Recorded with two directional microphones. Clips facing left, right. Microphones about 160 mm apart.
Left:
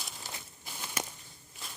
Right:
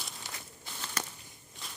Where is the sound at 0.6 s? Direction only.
10° left (ahead or behind).